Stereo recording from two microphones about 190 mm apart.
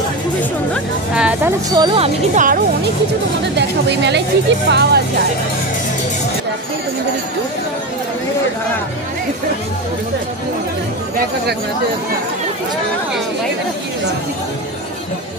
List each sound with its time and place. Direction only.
1.1 s music: 5° right (ahead or behind)
1.8 s speech: 25° right (ahead or behind)
2.3 s speech: 45° right (ahead or behind)
3.5 s speech: 65° right (ahead or behind)